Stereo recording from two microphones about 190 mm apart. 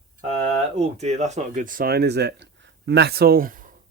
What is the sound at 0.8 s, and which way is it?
Speech, 35° right (ahead or behind).